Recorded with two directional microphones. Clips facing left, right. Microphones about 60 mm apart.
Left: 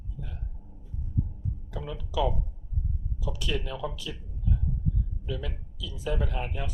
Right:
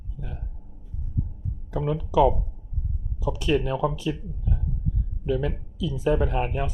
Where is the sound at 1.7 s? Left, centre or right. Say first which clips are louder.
Right 10 dB; right.